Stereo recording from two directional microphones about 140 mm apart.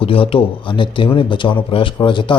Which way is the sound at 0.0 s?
40° left (ahead or behind).